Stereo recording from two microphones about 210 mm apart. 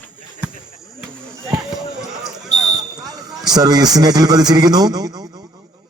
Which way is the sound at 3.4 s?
20° right (ahead or behind).